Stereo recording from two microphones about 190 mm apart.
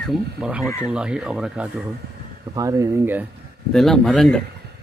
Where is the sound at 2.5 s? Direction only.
15° right (ahead or behind).